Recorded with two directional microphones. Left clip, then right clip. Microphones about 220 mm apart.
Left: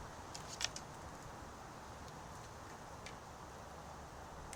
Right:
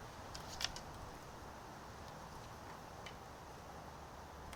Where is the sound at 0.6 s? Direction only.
15° right (ahead or behind).